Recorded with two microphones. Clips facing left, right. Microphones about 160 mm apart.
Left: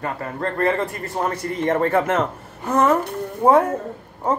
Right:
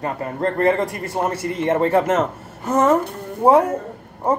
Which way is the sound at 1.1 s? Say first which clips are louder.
Right 1 dB; 10° right (ahead or behind).